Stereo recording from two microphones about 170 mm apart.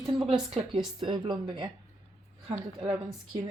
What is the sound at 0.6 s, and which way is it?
A woman's voice, 35° right (ahead or behind).